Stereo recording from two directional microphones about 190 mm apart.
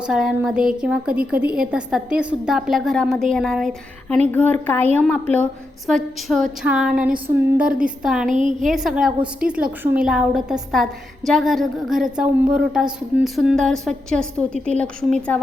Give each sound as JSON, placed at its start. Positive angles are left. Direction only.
{"t": 0.0, "sound": "a woman's voice", "side_deg": -5}
{"t": 8.3, "sound": "a woman's voice", "side_deg": -40}
{"t": 8.6, "sound": "a woman's voice", "side_deg": 0}